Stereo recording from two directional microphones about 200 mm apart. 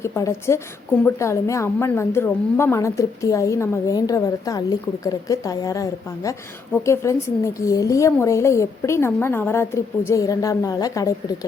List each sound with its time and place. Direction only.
0.0 s a woman's voice: 15° left (ahead or behind)